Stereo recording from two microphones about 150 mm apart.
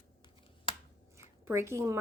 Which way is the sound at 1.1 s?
15° right (ahead or behind).